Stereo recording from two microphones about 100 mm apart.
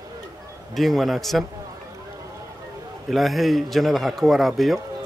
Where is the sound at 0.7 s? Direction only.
Centre (ahead or behind).